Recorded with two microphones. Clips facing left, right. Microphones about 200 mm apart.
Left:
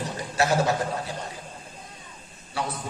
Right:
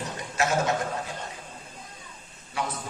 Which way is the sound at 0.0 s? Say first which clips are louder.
Left 3 dB; 35° left (ahead or behind).